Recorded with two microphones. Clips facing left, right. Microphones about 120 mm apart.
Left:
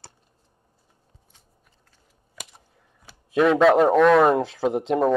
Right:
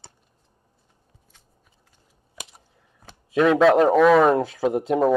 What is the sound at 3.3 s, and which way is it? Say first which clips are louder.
Speech: even; centre (ahead or behind).